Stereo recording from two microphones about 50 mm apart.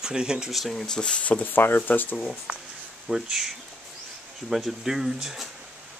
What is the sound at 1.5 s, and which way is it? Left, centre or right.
Speech, left.